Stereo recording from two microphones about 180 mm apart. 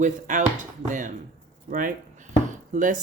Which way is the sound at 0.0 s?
45° right (ahead or behind).